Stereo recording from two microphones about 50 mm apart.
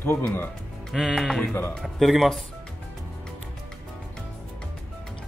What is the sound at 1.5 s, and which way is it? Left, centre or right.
Speech, left.